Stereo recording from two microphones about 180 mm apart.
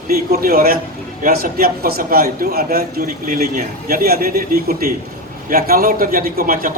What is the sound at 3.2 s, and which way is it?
A man's voice, 45° right (ahead or behind).